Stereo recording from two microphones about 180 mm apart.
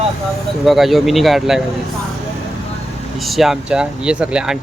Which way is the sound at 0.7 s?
Centre (ahead or behind).